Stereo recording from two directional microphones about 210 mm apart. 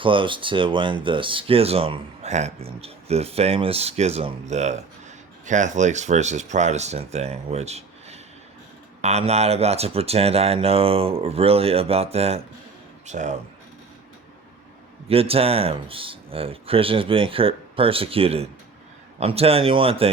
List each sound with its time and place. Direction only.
0.0 s speech: 25° right (ahead or behind)
15.1 s speech: 25° right (ahead or behind)